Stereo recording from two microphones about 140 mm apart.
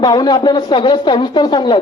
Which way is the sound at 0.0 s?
30° left (ahead or behind).